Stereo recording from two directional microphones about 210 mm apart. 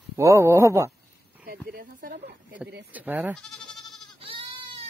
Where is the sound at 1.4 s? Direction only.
45° right (ahead or behind).